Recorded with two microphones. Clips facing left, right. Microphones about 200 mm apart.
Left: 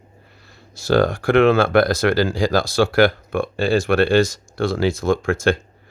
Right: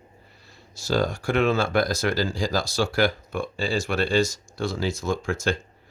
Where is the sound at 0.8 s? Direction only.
60° left (ahead or behind).